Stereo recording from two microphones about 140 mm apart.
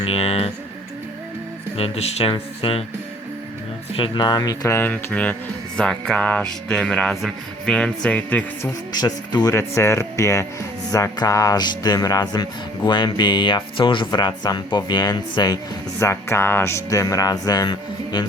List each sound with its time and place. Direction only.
0.0 s a sound: 45° left (ahead or behind)
1.7 s speech: 45° left (ahead or behind)
2.3 s music: 40° left (ahead or behind)
3.9 s music: 35° left (ahead or behind)
4.8 s music: 10° left (ahead or behind)
8.9 s speech: 30° left (ahead or behind)
10.9 s music: 25° left (ahead or behind)
16.0 s speech: 20° left (ahead or behind)